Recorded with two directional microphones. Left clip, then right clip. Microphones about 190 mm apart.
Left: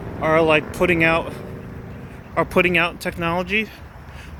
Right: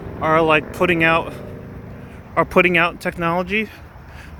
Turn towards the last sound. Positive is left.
turn(degrees=-15)  # may be behind; listen again after turning